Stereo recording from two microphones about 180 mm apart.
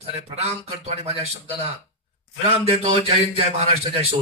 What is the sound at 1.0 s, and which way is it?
Speech, 35° right (ahead or behind).